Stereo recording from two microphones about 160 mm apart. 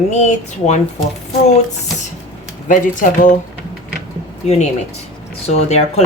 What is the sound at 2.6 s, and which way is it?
Speech, 55° left (ahead or behind).